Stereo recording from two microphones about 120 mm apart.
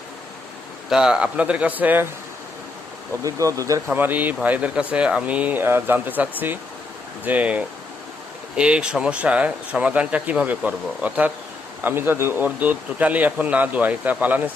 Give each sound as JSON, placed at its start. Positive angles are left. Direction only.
{"t": 0.9, "sound": "speech", "side_deg": -5}
{"t": 3.2, "sound": "speech", "side_deg": -25}
{"t": 3.8, "sound": "speech", "side_deg": -15}